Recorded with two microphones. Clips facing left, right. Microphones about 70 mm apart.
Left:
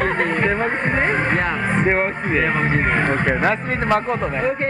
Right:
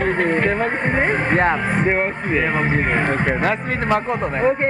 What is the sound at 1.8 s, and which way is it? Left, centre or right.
Speech, centre.